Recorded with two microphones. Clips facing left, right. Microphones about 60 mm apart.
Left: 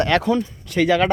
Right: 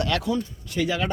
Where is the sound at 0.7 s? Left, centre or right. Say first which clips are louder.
Left 9 dB; left.